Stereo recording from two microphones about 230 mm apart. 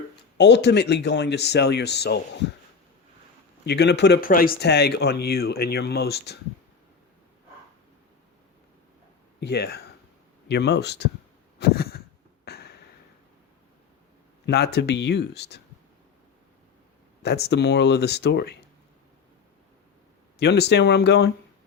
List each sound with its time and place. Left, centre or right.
0.3 s speech: left
3.7 s speech: left
9.4 s speech: left
11.6 s a sound: left
14.4 s speech: left
17.2 s speech: left
20.4 s speech: left